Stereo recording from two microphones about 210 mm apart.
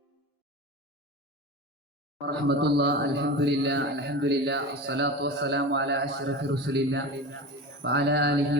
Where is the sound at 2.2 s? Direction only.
50° right (ahead or behind).